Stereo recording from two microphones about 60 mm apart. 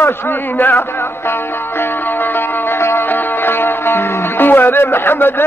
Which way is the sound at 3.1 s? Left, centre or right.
Left.